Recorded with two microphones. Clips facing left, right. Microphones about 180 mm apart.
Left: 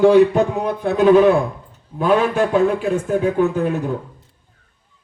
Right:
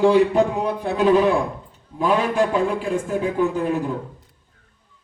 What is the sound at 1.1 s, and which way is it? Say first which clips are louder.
Speech: left 5 dB; 65° left (ahead or behind).